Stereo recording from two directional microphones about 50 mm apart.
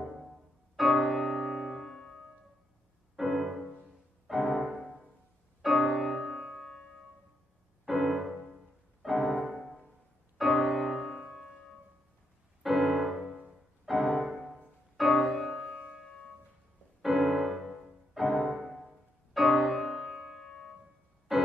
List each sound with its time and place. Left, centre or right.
0.7 s music: centre
3.2 s music: centre
7.8 s music: centre
11.1 s music: centre
12.6 s music: centre
15.7 s music: centre
17.0 s music: centre
20.1 s music: centre
20.3 s piano: centre
21.3 s music: centre